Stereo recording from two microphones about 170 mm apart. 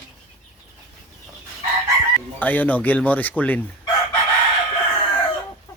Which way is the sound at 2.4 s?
10° left (ahead or behind).